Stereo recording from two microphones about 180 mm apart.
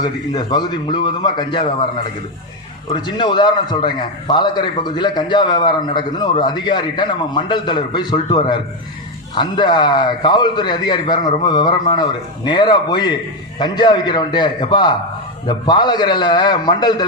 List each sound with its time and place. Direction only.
0.0 s a man's voice: 25° left (ahead or behind)
2.9 s a man's voice: 25° left (ahead or behind)